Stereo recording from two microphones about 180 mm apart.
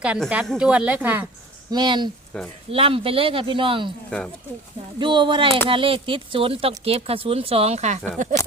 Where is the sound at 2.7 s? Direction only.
30° right (ahead or behind).